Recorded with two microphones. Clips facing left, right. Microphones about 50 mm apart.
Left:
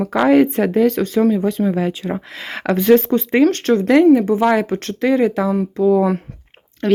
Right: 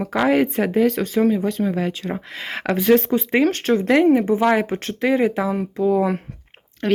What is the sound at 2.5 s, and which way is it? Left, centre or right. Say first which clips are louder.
Speech: left 3 dB; centre.